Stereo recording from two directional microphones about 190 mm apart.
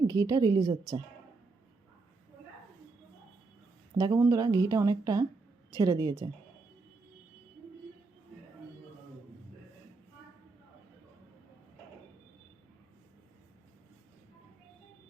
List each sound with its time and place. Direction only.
0.1 s a woman's voice: 20° right (ahead or behind)
3.9 s a woman's voice: 20° right (ahead or behind)